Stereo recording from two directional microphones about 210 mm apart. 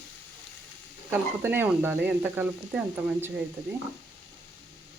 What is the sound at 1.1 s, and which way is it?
Speech, 10° right (ahead or behind).